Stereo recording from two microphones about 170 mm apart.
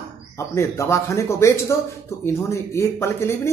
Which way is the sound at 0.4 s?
15° left (ahead or behind).